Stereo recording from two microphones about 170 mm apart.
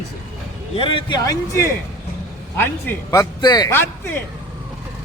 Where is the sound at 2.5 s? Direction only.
10° left (ahead or behind).